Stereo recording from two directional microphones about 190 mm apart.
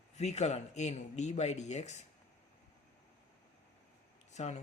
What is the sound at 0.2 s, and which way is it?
Speech, 35° left (ahead or behind).